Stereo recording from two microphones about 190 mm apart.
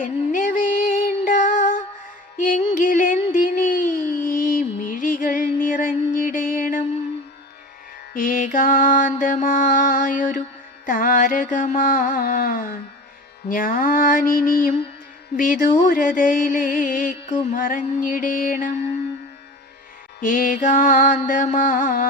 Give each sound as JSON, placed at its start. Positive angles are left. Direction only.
{"t": 0.0, "sound": "music", "side_deg": 45}
{"t": 8.1, "sound": "mantra", "side_deg": 45}
{"t": 10.8, "sound": "music", "side_deg": 45}
{"t": 20.2, "sound": "music", "side_deg": 45}